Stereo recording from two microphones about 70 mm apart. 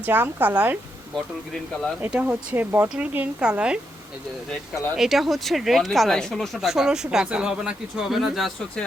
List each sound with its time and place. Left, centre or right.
0.0 s a woman's voice: right
1.1 s speech: centre
2.0 s a woman's voice: centre
4.9 s speech: centre